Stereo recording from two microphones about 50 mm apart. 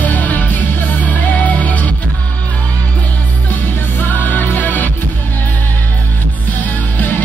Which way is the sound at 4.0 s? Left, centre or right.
Left.